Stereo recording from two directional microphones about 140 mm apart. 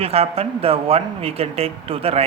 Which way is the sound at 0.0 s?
45° right (ahead or behind).